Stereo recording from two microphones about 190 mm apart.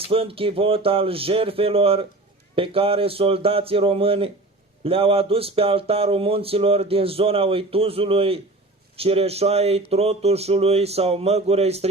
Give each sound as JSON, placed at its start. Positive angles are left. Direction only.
{"t": 0.1, "sound": "speech", "side_deg": -30}